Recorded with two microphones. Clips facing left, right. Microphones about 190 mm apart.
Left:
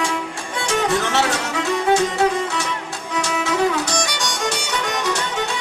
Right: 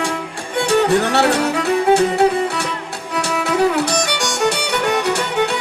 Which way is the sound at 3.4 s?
60° right (ahead or behind).